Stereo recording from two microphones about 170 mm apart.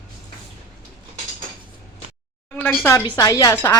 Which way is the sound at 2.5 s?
10° left (ahead or behind).